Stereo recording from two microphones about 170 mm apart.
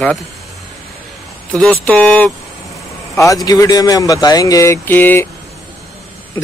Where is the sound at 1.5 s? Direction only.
5° left (ahead or behind).